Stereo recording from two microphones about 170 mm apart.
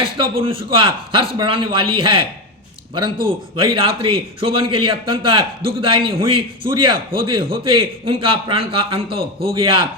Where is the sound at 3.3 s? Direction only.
30° right (ahead or behind).